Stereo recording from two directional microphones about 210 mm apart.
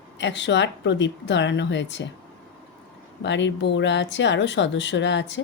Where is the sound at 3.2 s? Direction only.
60° left (ahead or behind).